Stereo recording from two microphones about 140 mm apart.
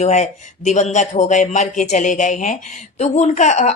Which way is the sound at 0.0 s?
55° left (ahead or behind).